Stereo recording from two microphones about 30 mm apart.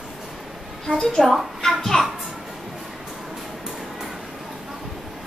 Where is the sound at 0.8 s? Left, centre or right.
Centre.